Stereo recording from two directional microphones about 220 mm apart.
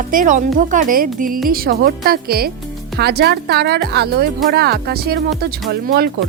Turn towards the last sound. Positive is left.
turn(degrees=-45)  # may be behind; listen again after turning